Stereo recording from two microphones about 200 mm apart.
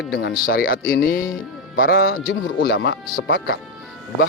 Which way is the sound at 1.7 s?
65° left (ahead or behind).